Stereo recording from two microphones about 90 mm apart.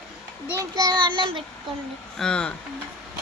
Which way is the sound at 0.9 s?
65° right (ahead or behind).